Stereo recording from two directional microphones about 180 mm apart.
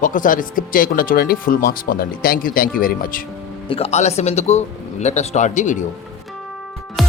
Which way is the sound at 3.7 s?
30° left (ahead or behind).